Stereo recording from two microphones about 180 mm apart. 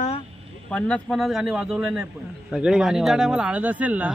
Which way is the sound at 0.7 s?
5° left (ahead or behind).